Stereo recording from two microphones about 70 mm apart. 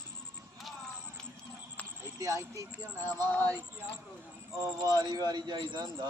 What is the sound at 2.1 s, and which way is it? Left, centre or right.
Speech, right.